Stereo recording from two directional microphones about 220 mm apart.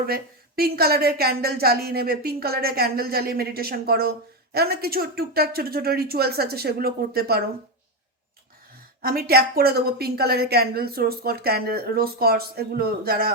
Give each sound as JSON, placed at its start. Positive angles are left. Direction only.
{"t": 0.0, "sound": "a woman's voice", "side_deg": -45}
{"t": 9.0, "sound": "a woman's voice", "side_deg": -45}